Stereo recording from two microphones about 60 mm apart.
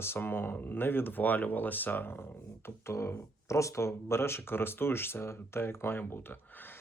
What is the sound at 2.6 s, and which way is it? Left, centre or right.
Speech, left.